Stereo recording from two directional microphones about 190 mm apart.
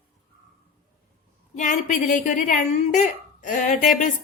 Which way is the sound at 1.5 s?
40° left (ahead or behind).